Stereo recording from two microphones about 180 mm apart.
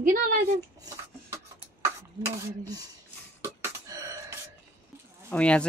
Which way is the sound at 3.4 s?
15° right (ahead or behind).